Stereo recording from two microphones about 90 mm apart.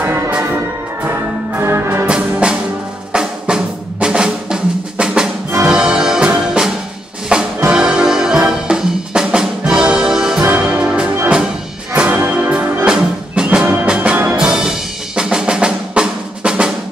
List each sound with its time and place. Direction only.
0.0 s music: 25° right (ahead or behind)
2.4 s music: 15° right (ahead or behind)
3.1 s drum: 10° right (ahead or behind)
5.7 s music: 10° right (ahead or behind)